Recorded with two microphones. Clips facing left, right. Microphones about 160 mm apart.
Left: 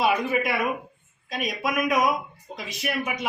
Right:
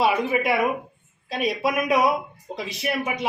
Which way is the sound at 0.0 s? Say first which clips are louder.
Right 2 dB; 25° right (ahead or behind).